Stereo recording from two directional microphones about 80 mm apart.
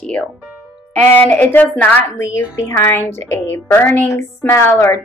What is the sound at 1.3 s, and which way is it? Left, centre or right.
A woman's voice, left.